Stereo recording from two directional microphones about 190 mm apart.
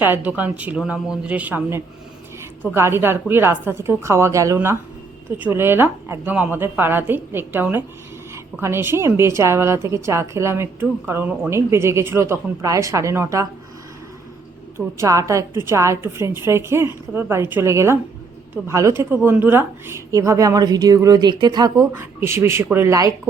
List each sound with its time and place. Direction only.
0.3 s a woman's voice: 10° right (ahead or behind)
14.8 s a woman's voice: 15° right (ahead or behind)